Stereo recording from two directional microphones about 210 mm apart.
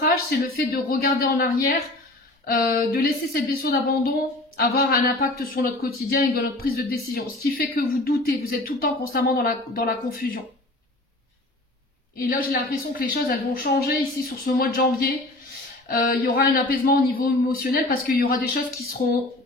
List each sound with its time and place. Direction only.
0.1 s speech: 50° left (ahead or behind)
12.2 s speech: 45° left (ahead or behind)